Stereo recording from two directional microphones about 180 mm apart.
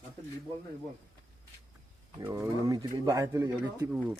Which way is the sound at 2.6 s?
20° right (ahead or behind).